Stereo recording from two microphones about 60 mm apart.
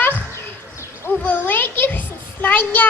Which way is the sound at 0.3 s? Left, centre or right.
Left.